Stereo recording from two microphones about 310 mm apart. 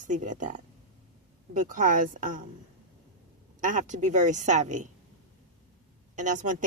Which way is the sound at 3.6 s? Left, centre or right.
Right.